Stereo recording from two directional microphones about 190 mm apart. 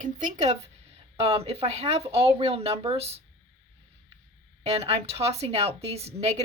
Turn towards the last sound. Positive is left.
turn(degrees=-35)  # may be behind; listen again after turning